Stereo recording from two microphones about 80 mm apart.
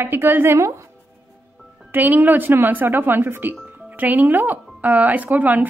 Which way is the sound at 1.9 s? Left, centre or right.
Right.